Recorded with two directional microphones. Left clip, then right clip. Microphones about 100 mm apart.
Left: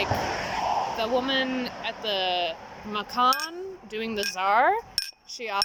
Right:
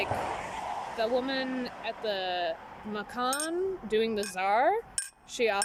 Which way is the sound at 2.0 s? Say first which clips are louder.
Left 5 dB; 40° right (ahead or behind).